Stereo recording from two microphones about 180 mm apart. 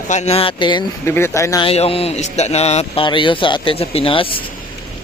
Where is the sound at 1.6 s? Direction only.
35° left (ahead or behind).